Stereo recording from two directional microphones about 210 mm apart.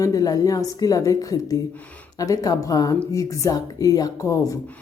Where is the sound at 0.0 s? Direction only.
15° left (ahead or behind).